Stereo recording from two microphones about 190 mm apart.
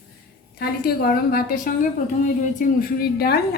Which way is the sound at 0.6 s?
55° left (ahead or behind).